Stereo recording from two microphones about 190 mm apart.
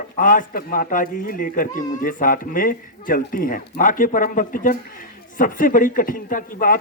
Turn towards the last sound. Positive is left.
turn(degrees=45)  # may be behind; listen again after turning